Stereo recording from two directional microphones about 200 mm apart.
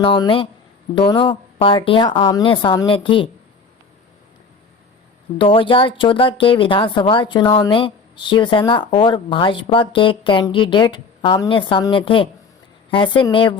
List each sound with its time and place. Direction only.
0.0 s speech: 25° left (ahead or behind)
5.4 s speech: 25° left (ahead or behind)